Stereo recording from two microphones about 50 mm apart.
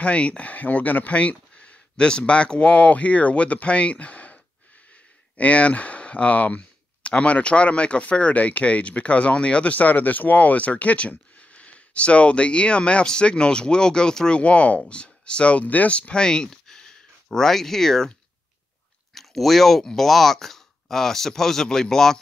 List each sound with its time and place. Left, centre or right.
0.0 s speech: left
5.4 s speech: left
9.8 s speech: left; by 14.4 s centre
14.4 s speech: left; by 18.1 s centre
19.1 s speech: centre